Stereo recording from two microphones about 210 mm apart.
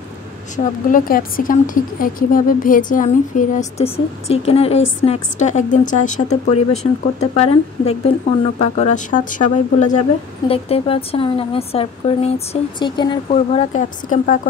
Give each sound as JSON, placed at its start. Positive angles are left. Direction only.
{"t": 0.8, "sound": "speech", "side_deg": 40}